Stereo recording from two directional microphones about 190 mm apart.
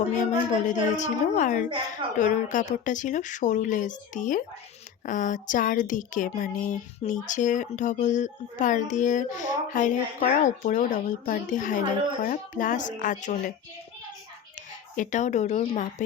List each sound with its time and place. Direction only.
0.1 s speech: 40° left (ahead or behind)
14.9 s speech: 40° left (ahead or behind)